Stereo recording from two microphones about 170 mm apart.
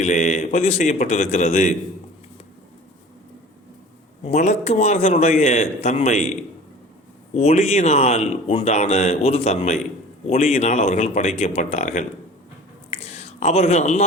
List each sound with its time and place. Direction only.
0.0 s a man's voice: 45° left (ahead or behind)
4.2 s speech: 45° left (ahead or behind)
7.3 s speech: 40° left (ahead or behind)
12.9 s a sound: 40° left (ahead or behind)